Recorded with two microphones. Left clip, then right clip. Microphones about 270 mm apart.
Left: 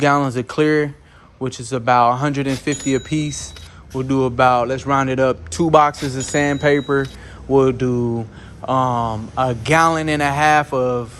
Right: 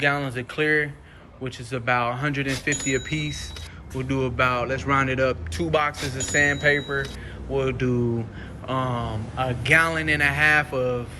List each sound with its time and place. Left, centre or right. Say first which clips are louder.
0.0 s speech: left 7 dB; left
6.0 s speech: left 4 dB; centre
6.3 s speech: left 3 dB; left